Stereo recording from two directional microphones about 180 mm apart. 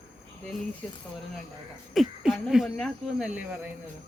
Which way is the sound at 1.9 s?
Centre (ahead or behind).